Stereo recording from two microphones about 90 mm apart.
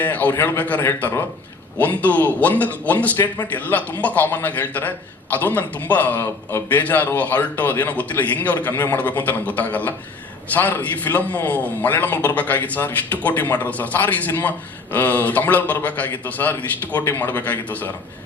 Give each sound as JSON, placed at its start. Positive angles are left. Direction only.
{"t": 0.0, "sound": "a man's voice", "side_deg": 20}